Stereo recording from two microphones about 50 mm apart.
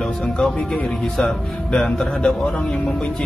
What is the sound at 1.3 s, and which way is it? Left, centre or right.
Speech, centre.